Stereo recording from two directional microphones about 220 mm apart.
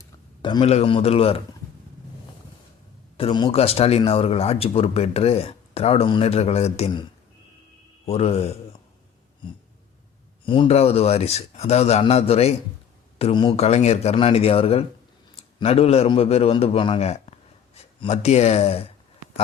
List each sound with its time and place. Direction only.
0.4 s speech: 25° left (ahead or behind)
3.2 s speech: 25° left (ahead or behind)
8.0 s speech: 30° left (ahead or behind)
10.4 s speech: 25° left (ahead or behind)